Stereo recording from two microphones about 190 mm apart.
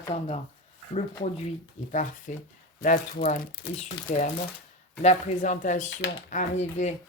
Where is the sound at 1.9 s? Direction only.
40° left (ahead or behind).